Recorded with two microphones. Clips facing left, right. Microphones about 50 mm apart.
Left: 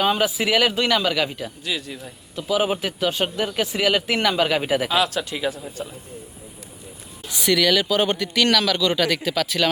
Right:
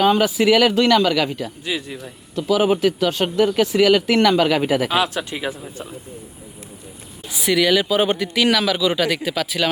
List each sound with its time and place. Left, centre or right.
0.0 s speech: centre
1.7 s speech: right
2.3 s speech: centre
4.9 s speech: right
7.3 s speech: centre